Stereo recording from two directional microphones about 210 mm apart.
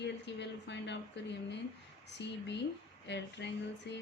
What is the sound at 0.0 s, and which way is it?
A woman's voice, 55° left (ahead or behind).